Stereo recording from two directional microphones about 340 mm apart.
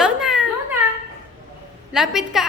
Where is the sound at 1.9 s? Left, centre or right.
Centre.